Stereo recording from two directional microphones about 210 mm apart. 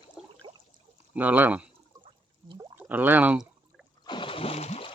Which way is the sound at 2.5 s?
25° right (ahead or behind).